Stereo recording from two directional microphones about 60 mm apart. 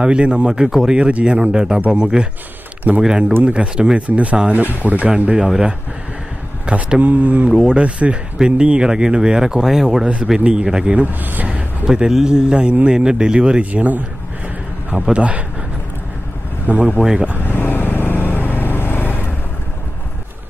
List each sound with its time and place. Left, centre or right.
0.0 s speech: centre
7.5 s speech: centre
11.1 s speech: right
11.4 s speech: centre
15.0 s speech: centre
16.7 s speech: right
17.0 s speech: centre
17.5 s vehicle: left